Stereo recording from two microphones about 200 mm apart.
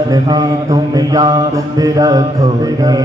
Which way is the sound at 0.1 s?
20° right (ahead or behind).